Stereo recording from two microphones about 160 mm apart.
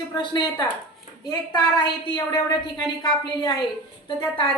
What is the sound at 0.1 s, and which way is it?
A woman's voice, 25° left (ahead or behind).